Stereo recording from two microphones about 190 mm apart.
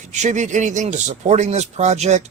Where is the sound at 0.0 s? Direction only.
40° right (ahead or behind).